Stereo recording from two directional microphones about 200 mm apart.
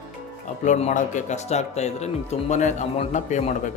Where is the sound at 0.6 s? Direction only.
35° left (ahead or behind).